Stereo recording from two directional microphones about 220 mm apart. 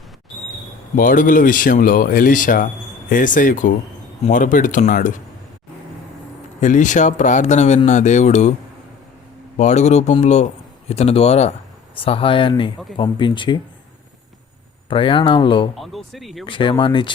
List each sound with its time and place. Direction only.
0.9 s speech: 40° left (ahead or behind)
6.6 s speech: 35° left (ahead or behind)
9.6 s speech: 30° left (ahead or behind)
14.8 s speech: 25° left (ahead or behind)
15.7 s speech: centre (ahead or behind)
16.5 s speech: 20° left (ahead or behind)